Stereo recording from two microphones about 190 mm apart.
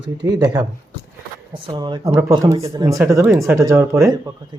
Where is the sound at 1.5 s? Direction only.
25° right (ahead or behind).